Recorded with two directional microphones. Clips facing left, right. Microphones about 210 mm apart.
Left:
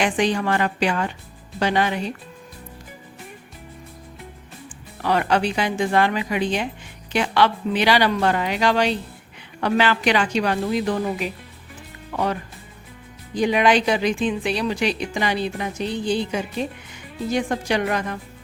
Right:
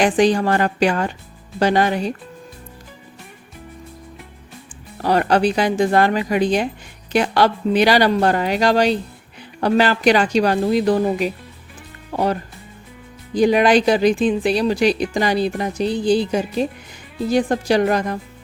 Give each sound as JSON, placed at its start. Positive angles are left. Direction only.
{"t": 0.0, "sound": "speech", "side_deg": -40}
{"t": 5.0, "sound": "speech", "side_deg": -40}